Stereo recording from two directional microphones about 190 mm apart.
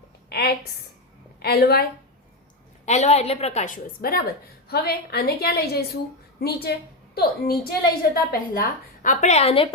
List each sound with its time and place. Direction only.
0.3 s a sound: 55° left (ahead or behind)
1.4 s a woman's voice: 55° left (ahead or behind)
2.8 s a woman's voice: 35° left (ahead or behind)